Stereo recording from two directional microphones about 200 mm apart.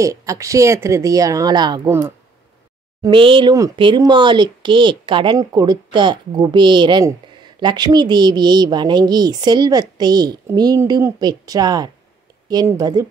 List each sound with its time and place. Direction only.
0.0 s speech: 15° right (ahead or behind)
3.0 s speech: 25° right (ahead or behind)